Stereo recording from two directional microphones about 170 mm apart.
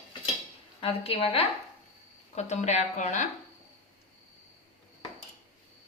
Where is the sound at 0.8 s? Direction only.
35° left (ahead or behind).